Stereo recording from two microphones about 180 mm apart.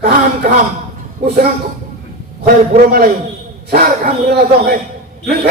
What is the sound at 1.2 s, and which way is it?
A man's voice, 60° right (ahead or behind).